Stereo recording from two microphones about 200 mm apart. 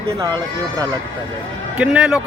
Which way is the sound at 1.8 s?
5° right (ahead or behind).